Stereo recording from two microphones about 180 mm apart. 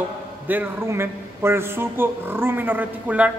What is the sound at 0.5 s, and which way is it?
A man's voice, 10° right (ahead or behind).